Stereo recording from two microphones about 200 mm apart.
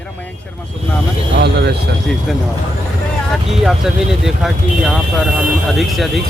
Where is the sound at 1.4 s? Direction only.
55° right (ahead or behind).